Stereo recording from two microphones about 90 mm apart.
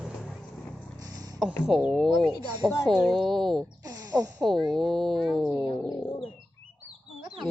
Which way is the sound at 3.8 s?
40° right (ahead or behind).